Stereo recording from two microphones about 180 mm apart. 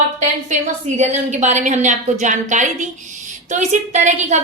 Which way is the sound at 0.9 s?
40° right (ahead or behind).